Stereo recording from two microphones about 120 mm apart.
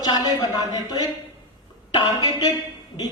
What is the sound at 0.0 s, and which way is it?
Speech, 35° left (ahead or behind).